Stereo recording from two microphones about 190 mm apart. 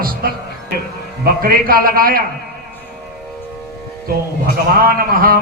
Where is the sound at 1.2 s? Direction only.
50° right (ahead or behind).